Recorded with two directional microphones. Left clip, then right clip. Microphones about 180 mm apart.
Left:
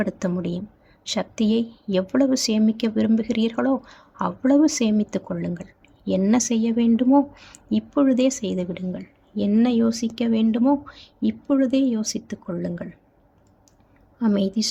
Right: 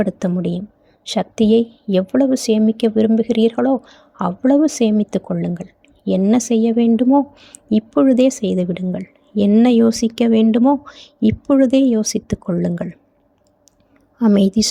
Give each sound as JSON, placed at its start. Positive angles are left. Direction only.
{"t": 0.0, "sound": "speech", "side_deg": -30}
{"t": 7.7, "sound": "a woman's voice", "side_deg": -35}
{"t": 14.3, "sound": "a woman's voice", "side_deg": -45}